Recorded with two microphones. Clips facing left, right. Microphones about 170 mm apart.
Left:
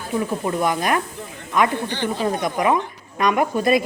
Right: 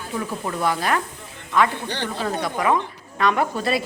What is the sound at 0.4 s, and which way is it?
A woman's voice, 15° left (ahead or behind).